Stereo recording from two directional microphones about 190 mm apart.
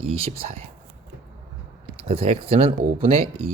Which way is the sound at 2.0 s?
30° right (ahead or behind).